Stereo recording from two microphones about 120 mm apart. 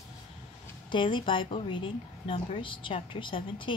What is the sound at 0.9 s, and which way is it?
A woman's voice, 45° left (ahead or behind).